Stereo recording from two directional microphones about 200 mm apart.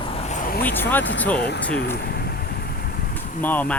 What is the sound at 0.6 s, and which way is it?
Speech, 10° left (ahead or behind).